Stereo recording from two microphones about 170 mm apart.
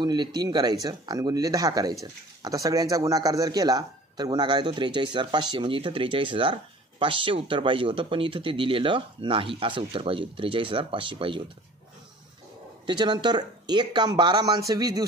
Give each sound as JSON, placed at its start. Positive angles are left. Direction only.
{"t": 0.0, "sound": "speech", "side_deg": -25}
{"t": 12.8, "sound": "speech", "side_deg": -25}